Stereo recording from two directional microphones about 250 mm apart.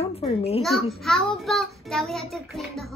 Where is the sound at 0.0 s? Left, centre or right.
Left.